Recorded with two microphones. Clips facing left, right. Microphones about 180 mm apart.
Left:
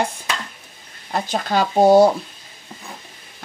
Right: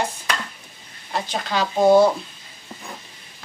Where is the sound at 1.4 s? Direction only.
45° left (ahead or behind).